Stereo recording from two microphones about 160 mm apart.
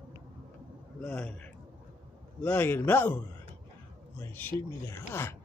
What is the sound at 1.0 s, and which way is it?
Speech, 10° left (ahead or behind).